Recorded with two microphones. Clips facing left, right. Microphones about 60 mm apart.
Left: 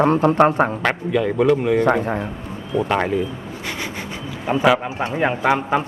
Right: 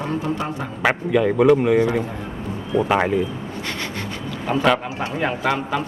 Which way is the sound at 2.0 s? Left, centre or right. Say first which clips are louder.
Left 7 dB; left.